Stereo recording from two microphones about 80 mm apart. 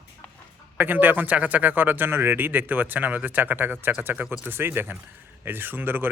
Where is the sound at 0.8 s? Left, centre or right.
Right.